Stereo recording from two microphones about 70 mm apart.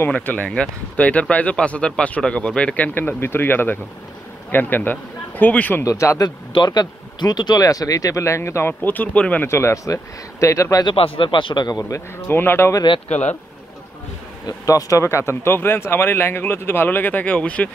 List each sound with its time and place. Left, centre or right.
0.0 s speech: left
5.9 s speech: left
6.2 s speech: left
8.8 s speech: left
9.5 s a man's voice: left
12.3 s speech: left
14.4 s speech: left; by 17.6 s centre